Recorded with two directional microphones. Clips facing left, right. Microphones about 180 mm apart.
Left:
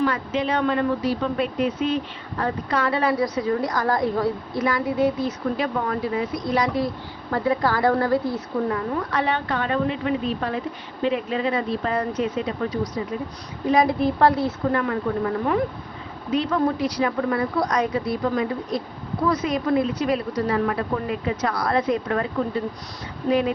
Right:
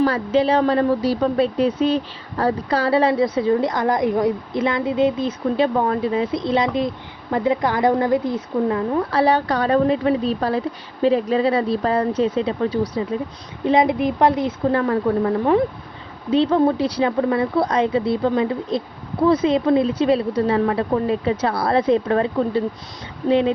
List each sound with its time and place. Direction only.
0.0 s a woman's voice: 35° right (ahead or behind)
9.0 s a woman's voice: 35° right (ahead or behind); by 14.8 s 20° right (ahead or behind)
16.3 s a woman's voice: 30° right (ahead or behind)